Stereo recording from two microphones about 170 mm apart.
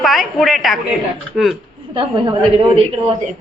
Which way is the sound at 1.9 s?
30° right (ahead or behind).